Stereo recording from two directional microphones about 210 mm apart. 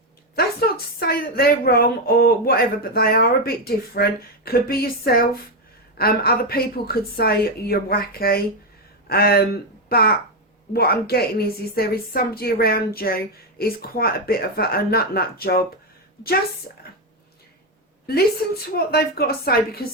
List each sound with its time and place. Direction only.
0.4 s a sound: 45° left (ahead or behind)
0.9 s a woman's voice: 45° left (ahead or behind)
18.0 s a woman's voice: 50° left (ahead or behind)